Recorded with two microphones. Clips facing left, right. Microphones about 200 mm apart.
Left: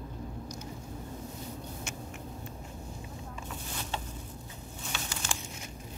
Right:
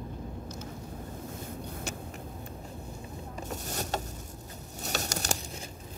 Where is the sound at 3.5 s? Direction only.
45° right (ahead or behind).